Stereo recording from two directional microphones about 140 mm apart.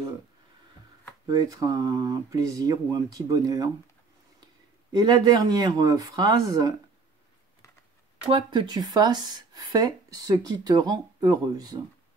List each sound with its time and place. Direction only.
1.2 s speech: 25° right (ahead or behind)
4.9 s speech: 30° right (ahead or behind)
8.3 s speech: 35° right (ahead or behind)